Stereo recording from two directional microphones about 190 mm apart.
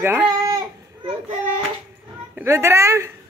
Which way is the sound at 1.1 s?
30° right (ahead or behind).